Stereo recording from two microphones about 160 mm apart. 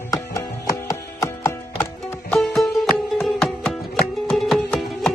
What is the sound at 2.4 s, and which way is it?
Music, centre (ahead or behind).